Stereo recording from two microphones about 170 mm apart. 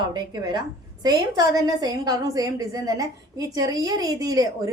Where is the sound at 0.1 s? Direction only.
25° right (ahead or behind).